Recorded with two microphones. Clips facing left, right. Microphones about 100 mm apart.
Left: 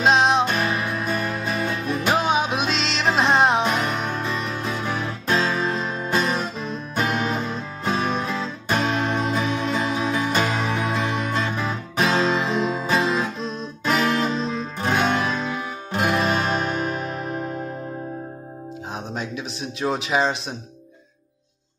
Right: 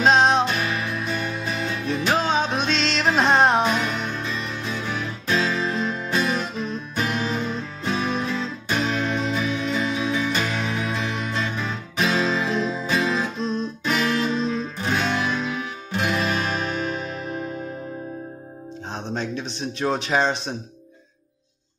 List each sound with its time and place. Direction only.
0.0 s music: centre (ahead or behind)
0.5 s music: 35° left (ahead or behind)
2.0 s music: 15° left (ahead or behind)
3.6 s music: 40° left (ahead or behind)
6.5 s music: centre (ahead or behind)
7.1 s music: 35° left (ahead or behind)
13.4 s music: centre (ahead or behind)
13.8 s music: 40° left (ahead or behind)
19.0 s a sound: 5° left (ahead or behind)